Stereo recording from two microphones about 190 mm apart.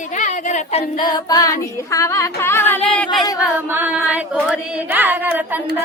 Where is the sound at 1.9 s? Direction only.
15° left (ahead or behind).